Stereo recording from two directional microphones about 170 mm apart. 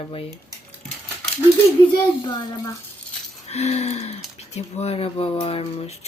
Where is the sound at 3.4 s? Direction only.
40° left (ahead or behind).